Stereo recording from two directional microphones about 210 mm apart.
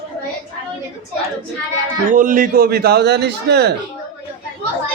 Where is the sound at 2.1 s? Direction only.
40° right (ahead or behind).